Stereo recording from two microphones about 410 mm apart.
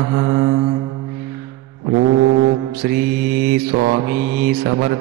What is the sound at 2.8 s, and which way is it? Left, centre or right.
Mantra, right.